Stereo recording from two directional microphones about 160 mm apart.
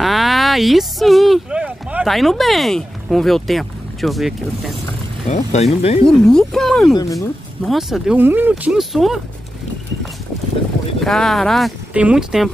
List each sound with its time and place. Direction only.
0.0 s speech: centre (ahead or behind)
5.3 s speech: 45° left (ahead or behind)
6.0 s speech: 5° left (ahead or behind)
7.0 s speech: 20° left (ahead or behind)
7.6 s speech: centre (ahead or behind)
11.0 s speech: centre (ahead or behind)